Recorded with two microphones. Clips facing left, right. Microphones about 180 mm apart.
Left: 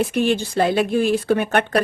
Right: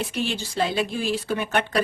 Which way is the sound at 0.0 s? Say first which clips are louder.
Left 8 dB; 55° left (ahead or behind).